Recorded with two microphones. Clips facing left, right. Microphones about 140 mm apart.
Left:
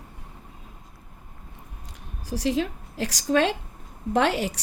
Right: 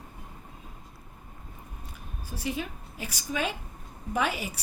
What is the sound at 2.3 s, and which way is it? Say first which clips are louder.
A woman's voice: left 8 dB; 90° left.